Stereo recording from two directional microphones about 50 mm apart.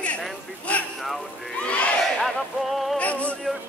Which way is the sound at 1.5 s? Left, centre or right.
Left.